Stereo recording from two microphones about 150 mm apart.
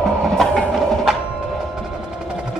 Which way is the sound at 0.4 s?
Centre (ahead or behind).